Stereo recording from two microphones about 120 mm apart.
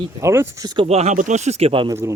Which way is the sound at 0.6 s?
35° right (ahead or behind).